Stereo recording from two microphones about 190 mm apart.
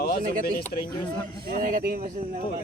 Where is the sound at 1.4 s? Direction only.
45° right (ahead or behind).